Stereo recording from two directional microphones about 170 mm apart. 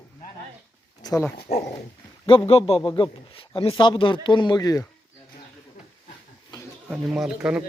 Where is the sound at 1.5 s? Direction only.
65° left (ahead or behind).